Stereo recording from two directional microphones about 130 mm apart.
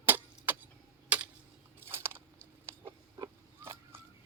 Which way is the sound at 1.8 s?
20° right (ahead or behind).